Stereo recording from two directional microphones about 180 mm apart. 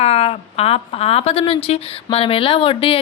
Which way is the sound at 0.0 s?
35° left (ahead or behind).